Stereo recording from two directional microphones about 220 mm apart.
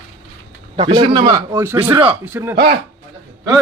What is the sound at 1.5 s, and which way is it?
A man's voice, 10° right (ahead or behind).